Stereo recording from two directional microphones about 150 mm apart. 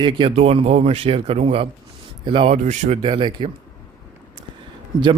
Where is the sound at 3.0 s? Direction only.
35° right (ahead or behind).